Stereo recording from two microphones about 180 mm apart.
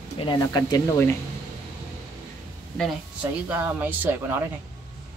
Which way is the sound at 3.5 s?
10° right (ahead or behind).